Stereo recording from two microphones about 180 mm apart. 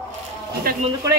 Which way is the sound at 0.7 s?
55° right (ahead or behind).